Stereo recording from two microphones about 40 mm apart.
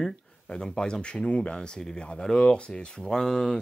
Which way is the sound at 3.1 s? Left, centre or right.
Centre.